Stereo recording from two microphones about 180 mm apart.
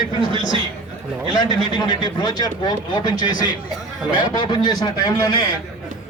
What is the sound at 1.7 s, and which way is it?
Speech, 25° left (ahead or behind).